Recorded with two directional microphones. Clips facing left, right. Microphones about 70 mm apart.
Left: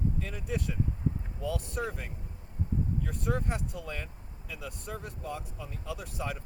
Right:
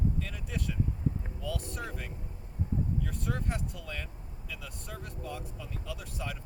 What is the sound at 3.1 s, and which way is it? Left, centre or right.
Speech, left.